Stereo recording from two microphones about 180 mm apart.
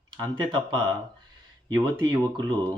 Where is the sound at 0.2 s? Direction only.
25° right (ahead or behind).